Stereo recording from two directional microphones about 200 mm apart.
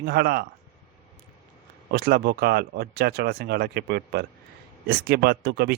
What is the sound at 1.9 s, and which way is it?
Speech, 50° right (ahead or behind).